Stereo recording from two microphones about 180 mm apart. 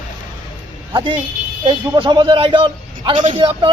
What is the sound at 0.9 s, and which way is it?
Speech, 25° right (ahead or behind).